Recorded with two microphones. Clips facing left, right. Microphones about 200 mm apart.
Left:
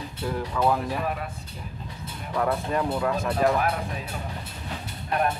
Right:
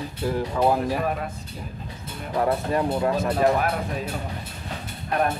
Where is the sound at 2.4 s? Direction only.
25° right (ahead or behind).